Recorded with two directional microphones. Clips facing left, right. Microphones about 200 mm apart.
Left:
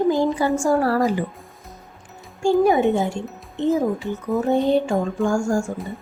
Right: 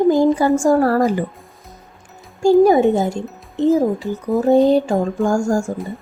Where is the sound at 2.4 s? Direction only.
40° right (ahead or behind).